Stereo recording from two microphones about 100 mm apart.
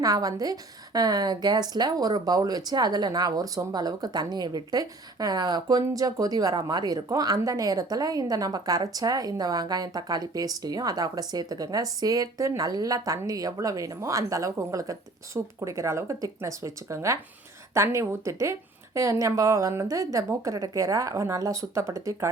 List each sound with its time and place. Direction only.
0.0 s a woman's voice: 40° right (ahead or behind)